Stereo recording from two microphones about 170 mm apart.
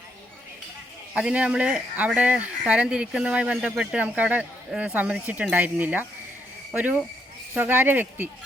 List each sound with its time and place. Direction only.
1.1 s speech: 5° right (ahead or behind)